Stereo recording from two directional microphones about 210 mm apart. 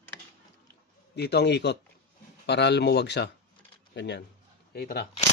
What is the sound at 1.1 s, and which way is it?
Speech, 50° left (ahead or behind).